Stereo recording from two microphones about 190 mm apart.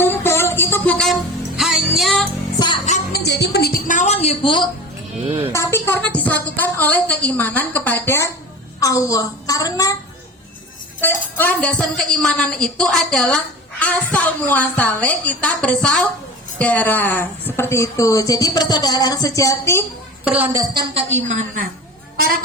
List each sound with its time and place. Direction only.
0.0 s music: 10° left (ahead or behind)
3.1 s music: 60° left (ahead or behind); by 4.7 s 25° left (ahead or behind)
5.2 s a woman's voice: 30° right (ahead or behind)
5.5 s speech: 15° left (ahead or behind)
11.0 s speech: 10° left (ahead or behind)
20.5 s speech: 15° right (ahead or behind)
20.9 s a woman's voice: 35° right (ahead or behind)